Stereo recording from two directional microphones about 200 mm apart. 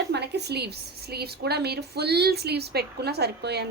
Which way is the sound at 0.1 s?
55° right (ahead or behind).